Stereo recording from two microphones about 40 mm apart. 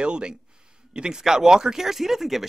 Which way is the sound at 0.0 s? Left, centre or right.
Right.